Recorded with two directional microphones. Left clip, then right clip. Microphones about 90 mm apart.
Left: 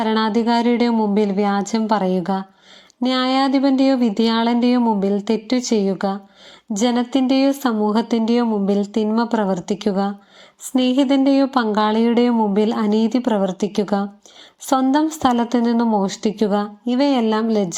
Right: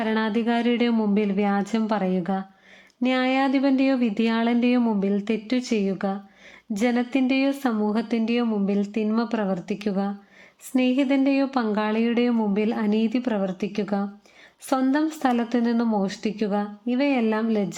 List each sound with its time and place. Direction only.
0.0 s a woman's voice: 10° left (ahead or behind)
17.2 s speech: 10° left (ahead or behind)